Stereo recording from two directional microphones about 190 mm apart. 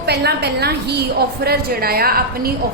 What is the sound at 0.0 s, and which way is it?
A woman's voice, 60° right (ahead or behind).